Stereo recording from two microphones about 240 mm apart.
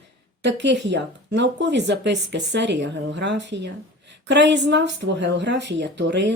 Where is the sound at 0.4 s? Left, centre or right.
Right.